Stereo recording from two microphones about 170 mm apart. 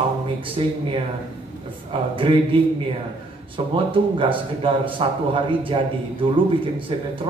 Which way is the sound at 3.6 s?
30° right (ahead or behind).